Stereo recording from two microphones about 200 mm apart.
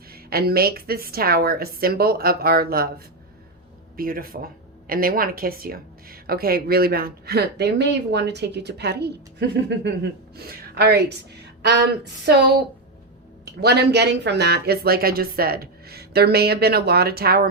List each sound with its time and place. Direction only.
0.1 s speech: 50° right (ahead or behind)
3.9 s speech: 45° right (ahead or behind)